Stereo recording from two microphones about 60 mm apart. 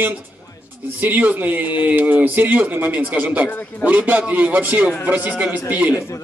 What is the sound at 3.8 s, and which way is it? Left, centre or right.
Speech, right.